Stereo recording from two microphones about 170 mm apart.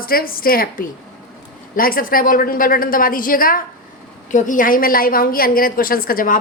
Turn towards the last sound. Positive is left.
turn(degrees=55)  # may be behind; listen again after turning